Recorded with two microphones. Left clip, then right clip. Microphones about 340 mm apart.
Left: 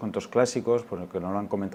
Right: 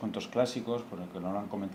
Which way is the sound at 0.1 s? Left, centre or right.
Left.